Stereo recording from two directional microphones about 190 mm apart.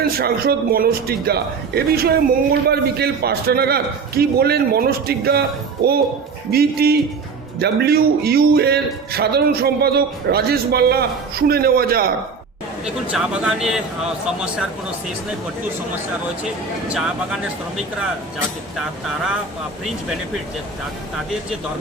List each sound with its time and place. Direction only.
0.2 s a man's voice: 55° right (ahead or behind)
6.5 s a man's voice: 55° right (ahead or behind)
12.8 s a man's voice: 5° right (ahead or behind)
16.9 s a man's voice: 5° right (ahead or behind)